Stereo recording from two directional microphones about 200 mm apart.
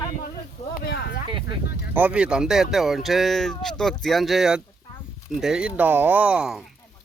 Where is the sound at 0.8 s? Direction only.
55° left (ahead or behind).